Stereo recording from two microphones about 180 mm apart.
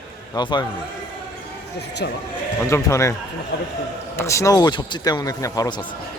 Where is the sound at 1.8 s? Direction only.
70° left (ahead or behind).